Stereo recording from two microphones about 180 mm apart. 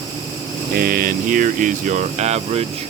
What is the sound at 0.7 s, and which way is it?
Speech, 55° right (ahead or behind).